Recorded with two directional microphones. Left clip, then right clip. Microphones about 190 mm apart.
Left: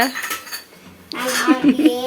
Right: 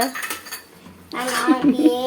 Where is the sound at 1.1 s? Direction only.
Centre (ahead or behind).